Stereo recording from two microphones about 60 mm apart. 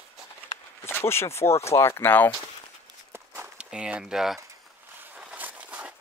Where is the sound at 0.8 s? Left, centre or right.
Left.